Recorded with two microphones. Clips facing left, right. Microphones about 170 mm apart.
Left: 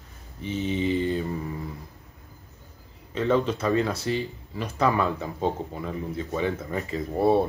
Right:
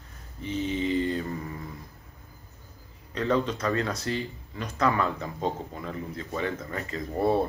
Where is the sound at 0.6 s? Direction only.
25° left (ahead or behind).